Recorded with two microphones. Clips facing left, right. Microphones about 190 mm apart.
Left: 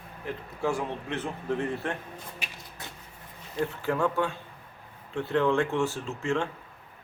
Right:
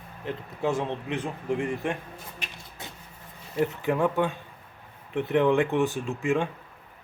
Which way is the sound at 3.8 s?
15° right (ahead or behind).